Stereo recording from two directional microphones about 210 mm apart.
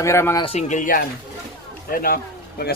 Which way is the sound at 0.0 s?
15° left (ahead or behind).